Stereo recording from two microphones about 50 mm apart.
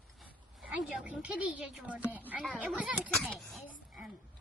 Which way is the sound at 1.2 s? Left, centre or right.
Right.